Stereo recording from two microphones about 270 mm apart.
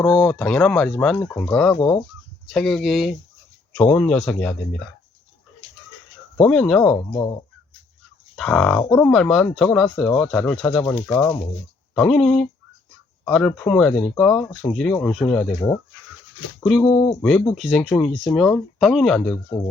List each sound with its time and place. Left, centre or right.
0.0 s speech: centre
6.4 s speech: centre
8.4 s speech: centre
17.2 s speech: centre